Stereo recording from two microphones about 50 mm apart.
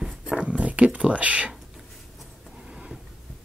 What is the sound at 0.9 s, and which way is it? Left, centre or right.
Speech, right.